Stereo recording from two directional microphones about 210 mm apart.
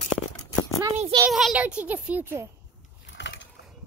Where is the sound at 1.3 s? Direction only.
Centre (ahead or behind).